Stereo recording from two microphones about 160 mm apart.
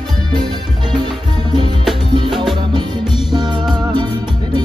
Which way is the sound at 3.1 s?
30° right (ahead or behind).